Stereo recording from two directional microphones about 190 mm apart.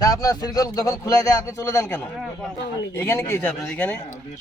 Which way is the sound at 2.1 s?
Centre (ahead or behind).